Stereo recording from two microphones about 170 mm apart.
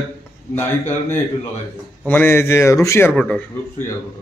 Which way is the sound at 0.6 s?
10° left (ahead or behind).